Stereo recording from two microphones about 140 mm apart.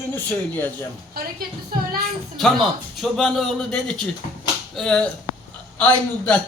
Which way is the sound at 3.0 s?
5° left (ahead or behind).